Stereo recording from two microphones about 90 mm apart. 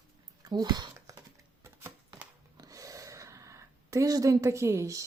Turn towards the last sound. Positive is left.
turn(degrees=-35)  # may be behind; listen again after turning